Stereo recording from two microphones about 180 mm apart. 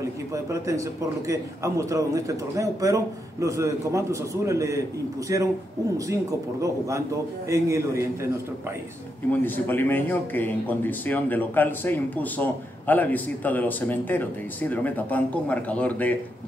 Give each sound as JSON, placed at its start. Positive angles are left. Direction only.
{"t": 0.0, "sound": "a man's voice", "side_deg": -15}
{"t": 7.4, "sound": "a man's voice", "side_deg": -15}
{"t": 9.3, "sound": "speech", "side_deg": 10}